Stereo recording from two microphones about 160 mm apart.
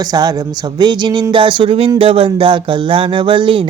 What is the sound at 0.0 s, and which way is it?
Speech, 25° right (ahead or behind).